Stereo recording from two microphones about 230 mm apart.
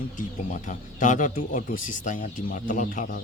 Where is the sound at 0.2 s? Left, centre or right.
Left.